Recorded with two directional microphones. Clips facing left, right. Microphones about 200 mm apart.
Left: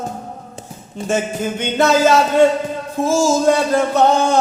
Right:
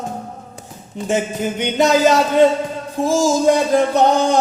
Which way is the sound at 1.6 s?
15° right (ahead or behind).